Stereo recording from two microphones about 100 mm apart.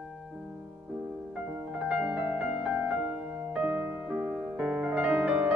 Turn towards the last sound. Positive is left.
turn(degrees=-15)  # may be behind; listen again after turning